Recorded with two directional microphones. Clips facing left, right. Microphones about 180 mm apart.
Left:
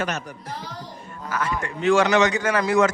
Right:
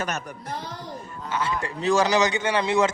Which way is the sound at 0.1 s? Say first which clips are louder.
Left 1 dB; 50° right (ahead or behind).